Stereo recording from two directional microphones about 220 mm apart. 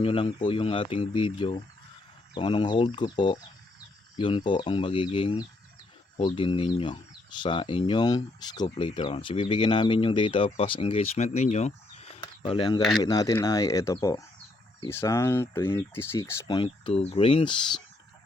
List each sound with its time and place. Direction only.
0.0 s speech: 25° left (ahead or behind)